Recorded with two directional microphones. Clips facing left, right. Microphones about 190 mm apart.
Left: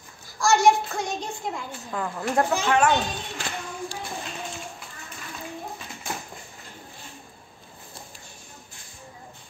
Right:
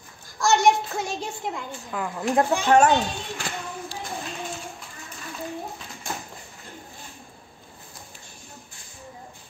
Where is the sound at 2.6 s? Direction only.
40° right (ahead or behind).